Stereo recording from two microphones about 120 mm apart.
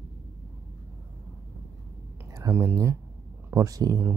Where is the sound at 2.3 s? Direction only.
25° right (ahead or behind).